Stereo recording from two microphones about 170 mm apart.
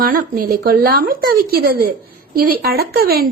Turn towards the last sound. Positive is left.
turn(degrees=-60)  # may be behind; listen again after turning